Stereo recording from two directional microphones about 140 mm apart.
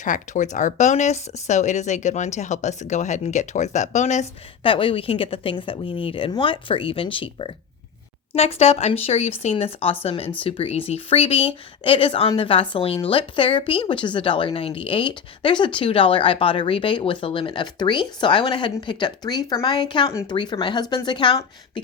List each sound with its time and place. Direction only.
0.0 s speech: 65° left (ahead or behind)
4.6 s a woman's voice: 40° left (ahead or behind)